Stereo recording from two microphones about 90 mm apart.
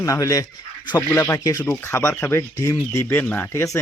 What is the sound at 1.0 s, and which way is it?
Speech, 20° left (ahead or behind).